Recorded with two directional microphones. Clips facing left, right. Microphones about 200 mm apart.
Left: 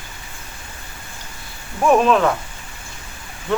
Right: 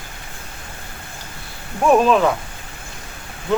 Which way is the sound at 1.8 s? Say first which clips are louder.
Right 1 dB; centre (ahead or behind).